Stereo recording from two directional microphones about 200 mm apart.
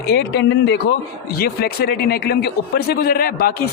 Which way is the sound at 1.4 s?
50° left (ahead or behind).